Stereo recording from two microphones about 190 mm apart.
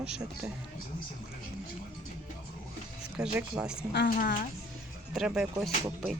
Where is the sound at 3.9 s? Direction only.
55° left (ahead or behind).